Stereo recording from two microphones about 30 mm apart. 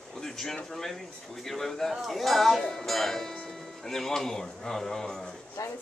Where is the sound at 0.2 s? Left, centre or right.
Centre.